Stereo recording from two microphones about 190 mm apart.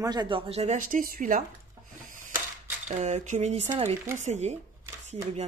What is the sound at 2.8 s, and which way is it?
Speech, 35° right (ahead or behind).